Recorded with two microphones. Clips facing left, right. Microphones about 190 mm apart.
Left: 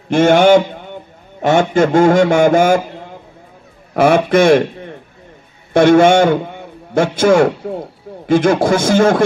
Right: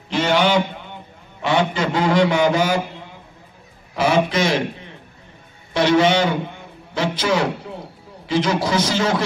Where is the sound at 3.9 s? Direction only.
55° left (ahead or behind).